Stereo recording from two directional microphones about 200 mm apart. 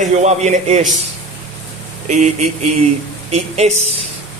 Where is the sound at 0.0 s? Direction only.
35° right (ahead or behind).